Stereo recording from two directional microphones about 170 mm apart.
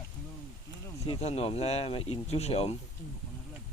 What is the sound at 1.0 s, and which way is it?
Speech, 35° left (ahead or behind).